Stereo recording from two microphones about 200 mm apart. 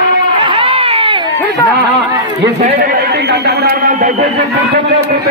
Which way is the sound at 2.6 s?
40° right (ahead or behind).